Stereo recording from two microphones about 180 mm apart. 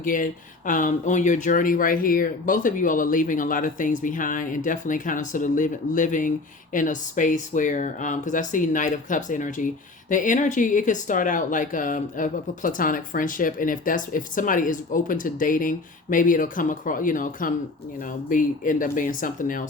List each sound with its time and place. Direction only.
0.0 s speech: 50° left (ahead or behind)